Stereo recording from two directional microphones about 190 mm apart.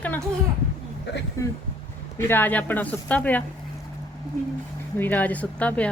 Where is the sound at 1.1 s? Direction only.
60° left (ahead or behind).